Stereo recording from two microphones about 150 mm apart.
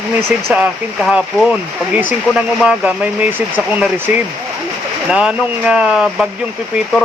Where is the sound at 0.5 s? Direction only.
5° right (ahead or behind).